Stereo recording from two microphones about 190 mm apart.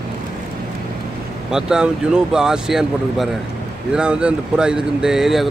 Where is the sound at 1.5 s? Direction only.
5° right (ahead or behind).